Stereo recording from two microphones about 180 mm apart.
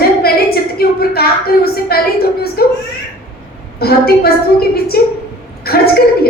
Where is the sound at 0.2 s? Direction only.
60° left (ahead or behind).